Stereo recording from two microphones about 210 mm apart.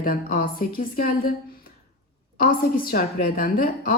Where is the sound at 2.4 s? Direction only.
45° left (ahead or behind).